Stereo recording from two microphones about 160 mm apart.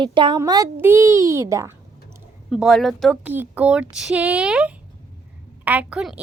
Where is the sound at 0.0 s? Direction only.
30° right (ahead or behind).